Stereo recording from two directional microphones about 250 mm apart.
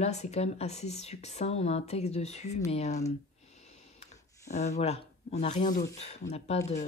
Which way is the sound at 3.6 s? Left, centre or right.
Left.